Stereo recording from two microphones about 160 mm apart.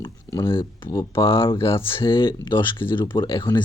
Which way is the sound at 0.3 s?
20° left (ahead or behind).